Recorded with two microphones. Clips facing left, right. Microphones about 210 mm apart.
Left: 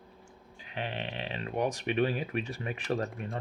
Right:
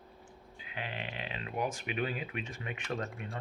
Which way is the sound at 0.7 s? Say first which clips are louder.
Left 5 dB; 30° left (ahead or behind).